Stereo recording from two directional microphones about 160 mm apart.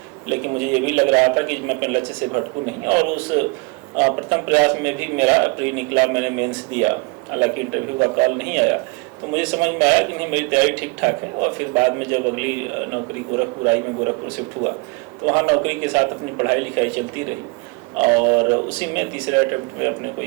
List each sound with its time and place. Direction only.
0.3 s a man's voice: 10° right (ahead or behind)
15.3 s a man's voice: 15° right (ahead or behind)
18.3 s a man's voice: 15° right (ahead or behind)